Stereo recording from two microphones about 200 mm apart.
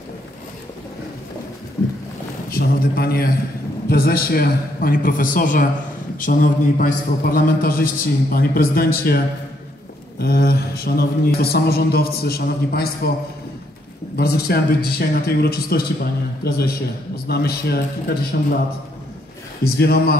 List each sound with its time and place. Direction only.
2.5 s a man's voice: 45° left (ahead or behind)
14.1 s a man's voice: 50° left (ahead or behind)
19.6 s a man's voice: 50° left (ahead or behind)